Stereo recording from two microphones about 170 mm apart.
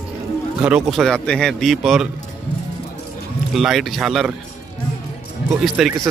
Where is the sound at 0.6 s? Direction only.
5° right (ahead or behind).